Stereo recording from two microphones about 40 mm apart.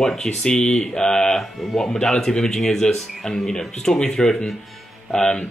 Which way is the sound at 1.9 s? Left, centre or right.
Centre.